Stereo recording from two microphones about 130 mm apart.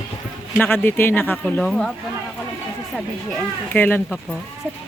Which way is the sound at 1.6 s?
5° left (ahead or behind).